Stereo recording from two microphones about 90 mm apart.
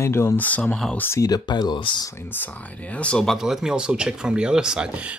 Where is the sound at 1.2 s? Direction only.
45° left (ahead or behind).